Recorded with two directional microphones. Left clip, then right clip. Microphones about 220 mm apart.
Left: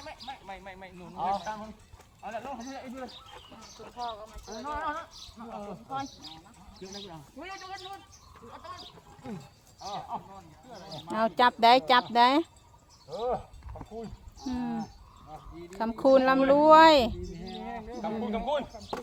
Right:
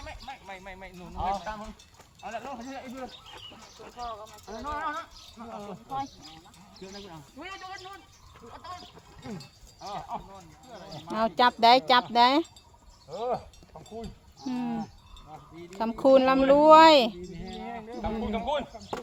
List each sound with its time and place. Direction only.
0.0 s a sound: 5° right (ahead or behind)
1.1 s speech: 5° left (ahead or behind)
1.5 s speech: 10° right (ahead or behind)
3.9 s speech: 40° left (ahead or behind)
4.4 s speech: 10° right (ahead or behind)
5.9 s speech: 40° left (ahead or behind)
6.7 s speech: 5° right (ahead or behind)
9.2 s speech: 5° right (ahead or behind)
11.1 s speech: 5° left (ahead or behind)
13.1 s speech: 10° right (ahead or behind)